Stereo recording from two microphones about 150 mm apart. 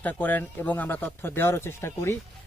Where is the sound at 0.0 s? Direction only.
10° left (ahead or behind).